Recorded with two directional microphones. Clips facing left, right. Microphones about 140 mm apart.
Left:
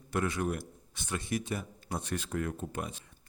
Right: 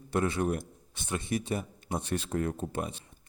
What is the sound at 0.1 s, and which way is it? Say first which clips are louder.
A man's voice: right 3 dB; 25° right (ahead or behind).